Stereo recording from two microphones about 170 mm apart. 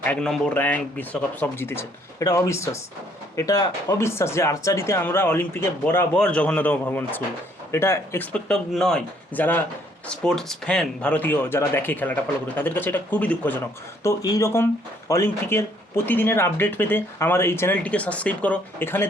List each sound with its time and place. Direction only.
0.0 s speech: 5° left (ahead or behind)
14.0 s speech: 20° left (ahead or behind)